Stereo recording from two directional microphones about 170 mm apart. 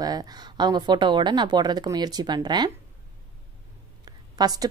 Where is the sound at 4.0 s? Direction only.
25° right (ahead or behind).